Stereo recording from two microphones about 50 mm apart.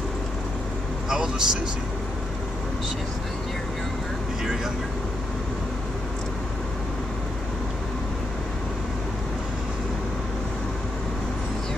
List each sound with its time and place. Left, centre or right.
1.0 s a man's voice: centre